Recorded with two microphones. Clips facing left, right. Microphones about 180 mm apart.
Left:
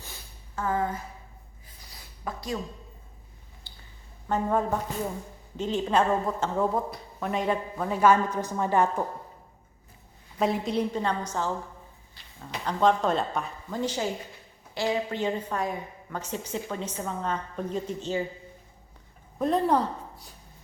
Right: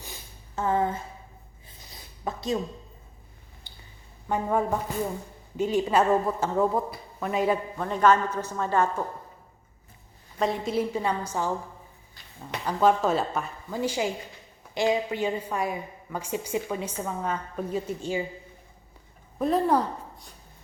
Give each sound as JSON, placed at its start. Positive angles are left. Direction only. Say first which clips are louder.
{"t": 0.0, "sound": "a sound", "louder": "right 2 dB", "side_deg": -20}
{"t": 3.7, "sound": "a sound", "louder": "right 1 dB", "side_deg": -15}
{"t": 4.3, "sound": "a woman's voice", "louder": "even", "side_deg": -10}
{"t": 7.9, "sound": "a woman's voice", "louder": "even", "side_deg": 10}
{"t": 10.3, "sound": "a woman's voice", "louder": "even", "side_deg": 5}
{"t": 12.6, "sound": "a man's voice", "louder": "right 1 dB", "side_deg": -5}
{"t": 19.4, "sound": "a woman's voice", "louder": "right 1 dB", "side_deg": 0}